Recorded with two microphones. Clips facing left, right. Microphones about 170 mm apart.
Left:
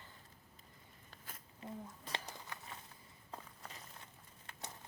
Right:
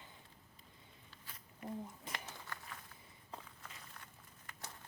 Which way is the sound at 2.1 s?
20° left (ahead or behind).